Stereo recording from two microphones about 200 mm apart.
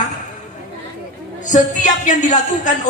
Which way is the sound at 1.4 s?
40° left (ahead or behind).